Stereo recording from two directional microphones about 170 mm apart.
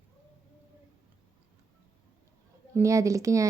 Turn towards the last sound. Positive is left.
turn(degrees=-20)  # may be behind; listen again after turning